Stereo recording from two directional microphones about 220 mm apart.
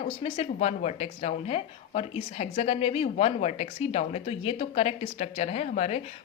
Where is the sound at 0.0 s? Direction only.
30° left (ahead or behind).